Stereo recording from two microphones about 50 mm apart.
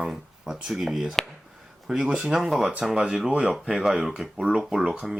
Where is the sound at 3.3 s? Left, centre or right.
Right.